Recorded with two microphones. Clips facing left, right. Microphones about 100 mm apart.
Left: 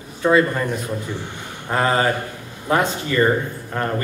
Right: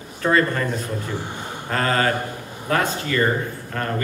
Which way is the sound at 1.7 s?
20° left (ahead or behind).